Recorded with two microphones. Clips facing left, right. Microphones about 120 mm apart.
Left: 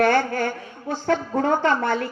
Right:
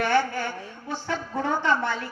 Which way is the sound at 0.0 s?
50° left (ahead or behind).